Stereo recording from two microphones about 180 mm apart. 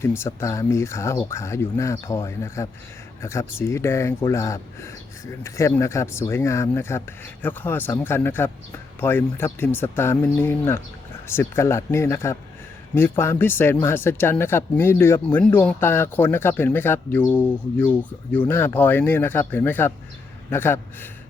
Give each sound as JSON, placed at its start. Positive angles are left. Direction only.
{"t": 0.0, "sound": "speech", "side_deg": 15}